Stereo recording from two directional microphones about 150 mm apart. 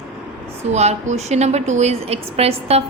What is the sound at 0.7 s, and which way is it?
A woman's voice, 45° right (ahead or behind).